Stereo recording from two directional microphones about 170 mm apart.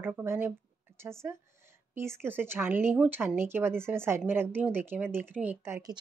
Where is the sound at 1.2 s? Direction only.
15° right (ahead or behind).